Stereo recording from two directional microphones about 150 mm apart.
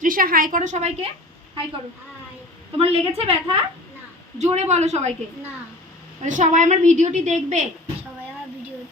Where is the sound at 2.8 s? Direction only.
40° right (ahead or behind).